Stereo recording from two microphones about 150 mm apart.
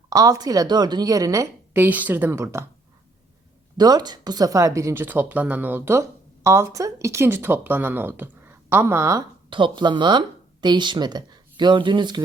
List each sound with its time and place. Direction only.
0.1 s a woman's voice: 25° right (ahead or behind)
3.8 s speech: 25° right (ahead or behind)
9.5 s speech: 35° right (ahead or behind)